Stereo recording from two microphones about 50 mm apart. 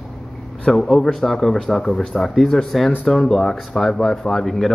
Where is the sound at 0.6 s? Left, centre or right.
Centre.